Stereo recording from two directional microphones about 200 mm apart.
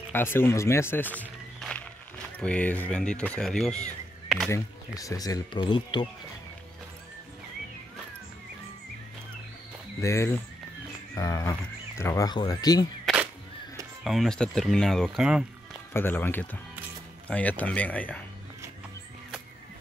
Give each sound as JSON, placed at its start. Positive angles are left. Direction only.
{"t": 0.1, "sound": "speech", "side_deg": 10}
{"t": 1.2, "sound": "music", "side_deg": 5}
{"t": 2.4, "sound": "speech", "side_deg": 5}
{"t": 4.5, "sound": "speech", "side_deg": 15}
{"t": 9.9, "sound": "speech", "side_deg": 15}
{"t": 13.0, "sound": "a sound", "side_deg": -5}
{"t": 14.0, "sound": "speech", "side_deg": 0}
{"t": 15.9, "sound": "speech", "side_deg": 10}